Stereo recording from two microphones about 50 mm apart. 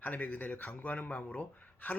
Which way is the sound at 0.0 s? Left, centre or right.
Left.